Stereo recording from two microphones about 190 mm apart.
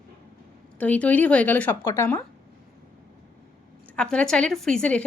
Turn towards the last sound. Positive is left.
turn(degrees=5)  # may be behind; listen again after turning